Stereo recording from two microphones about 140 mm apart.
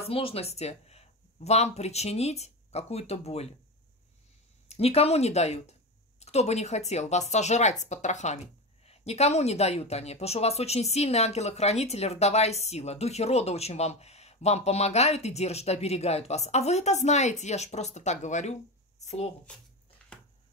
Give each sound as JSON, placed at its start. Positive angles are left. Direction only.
{"t": 0.0, "sound": "speech", "side_deg": 45}
{"t": 4.6, "sound": "speech", "side_deg": 45}